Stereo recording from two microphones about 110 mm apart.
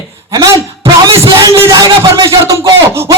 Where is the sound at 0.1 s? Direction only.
25° right (ahead or behind).